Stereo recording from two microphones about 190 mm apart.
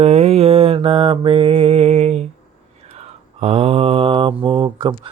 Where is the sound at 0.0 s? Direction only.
35° right (ahead or behind).